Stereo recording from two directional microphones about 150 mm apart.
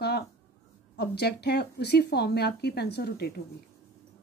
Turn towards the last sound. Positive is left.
turn(degrees=90)